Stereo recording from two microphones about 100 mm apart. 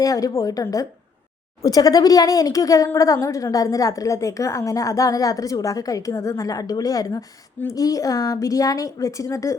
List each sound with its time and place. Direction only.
0.0 s speech: 35° left (ahead or behind)